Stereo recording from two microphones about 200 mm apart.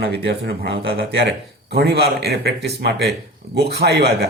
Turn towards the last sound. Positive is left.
turn(degrees=-55)  # may be behind; listen again after turning